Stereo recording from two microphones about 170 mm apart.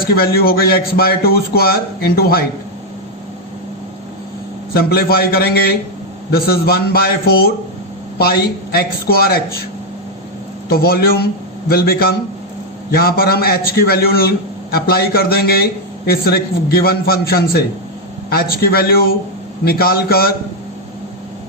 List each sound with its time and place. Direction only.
0.0 s a man's voice: 65° left (ahead or behind)
4.7 s a man's voice: 65° left (ahead or behind)
10.7 s a man's voice: 65° left (ahead or behind)